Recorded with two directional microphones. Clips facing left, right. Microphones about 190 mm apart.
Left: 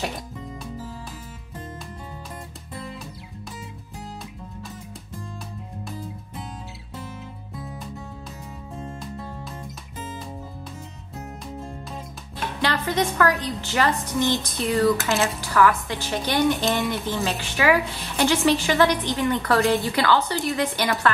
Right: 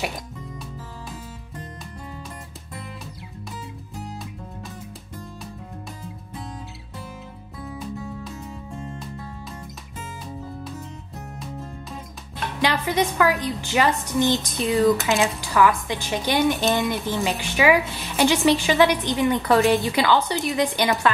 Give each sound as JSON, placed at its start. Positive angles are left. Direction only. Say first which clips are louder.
{"t": 12.6, "sound": "speech", "louder": "right 2 dB", "side_deg": -15}